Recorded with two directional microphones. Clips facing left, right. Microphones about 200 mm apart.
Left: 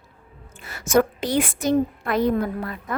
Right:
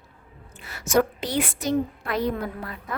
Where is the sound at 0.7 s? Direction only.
50° left (ahead or behind).